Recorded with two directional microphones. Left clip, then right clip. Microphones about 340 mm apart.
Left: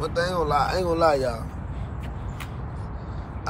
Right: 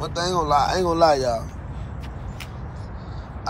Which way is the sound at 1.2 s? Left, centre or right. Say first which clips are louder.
Right 4 dB; centre.